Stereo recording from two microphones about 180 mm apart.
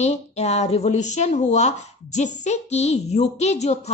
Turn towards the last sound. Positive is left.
turn(degrees=40)  # may be behind; listen again after turning